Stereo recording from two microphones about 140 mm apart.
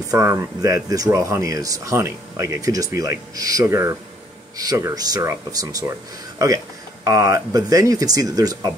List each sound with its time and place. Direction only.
0.1 s speech: 20° right (ahead or behind)